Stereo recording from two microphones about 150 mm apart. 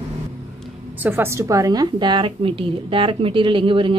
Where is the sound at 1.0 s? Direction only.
15° right (ahead or behind); by 3.9 s 35° right (ahead or behind).